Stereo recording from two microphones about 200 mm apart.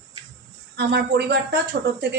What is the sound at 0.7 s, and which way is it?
Speech, 55° right (ahead or behind).